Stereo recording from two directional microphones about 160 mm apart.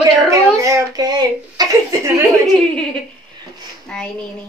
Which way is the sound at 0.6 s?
20° right (ahead or behind).